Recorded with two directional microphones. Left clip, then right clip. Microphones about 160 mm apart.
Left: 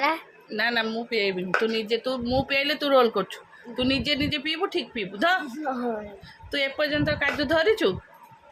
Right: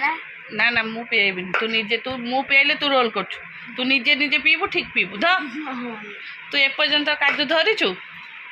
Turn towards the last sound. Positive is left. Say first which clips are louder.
# right 3 dB
turn(degrees=40)  # may be behind; listen again after turning